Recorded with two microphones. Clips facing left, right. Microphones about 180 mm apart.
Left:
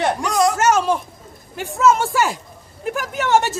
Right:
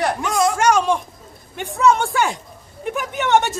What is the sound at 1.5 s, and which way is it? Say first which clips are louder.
A woman's voice: even; centre (ahead or behind).